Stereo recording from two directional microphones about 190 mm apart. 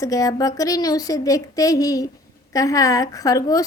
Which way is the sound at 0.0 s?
20° left (ahead or behind).